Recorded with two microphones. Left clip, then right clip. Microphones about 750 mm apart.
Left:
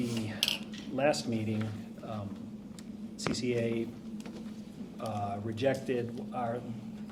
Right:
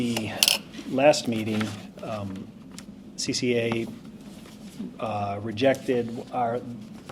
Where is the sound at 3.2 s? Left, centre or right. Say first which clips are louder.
Right 7 dB; right.